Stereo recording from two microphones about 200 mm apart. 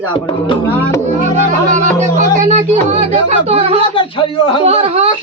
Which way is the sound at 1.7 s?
40° right (ahead or behind).